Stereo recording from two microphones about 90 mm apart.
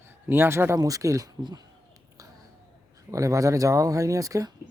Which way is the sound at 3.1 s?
35° right (ahead or behind).